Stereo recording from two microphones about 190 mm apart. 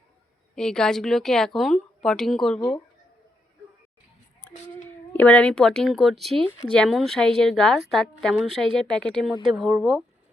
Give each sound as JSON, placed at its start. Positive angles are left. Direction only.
{"t": 0.5, "sound": "speech", "side_deg": 5}
{"t": 2.6, "sound": "speech", "side_deg": 25}
{"t": 4.4, "sound": "speech", "side_deg": 10}
{"t": 8.4, "sound": "speech", "side_deg": -25}
{"t": 8.8, "sound": "speech", "side_deg": 5}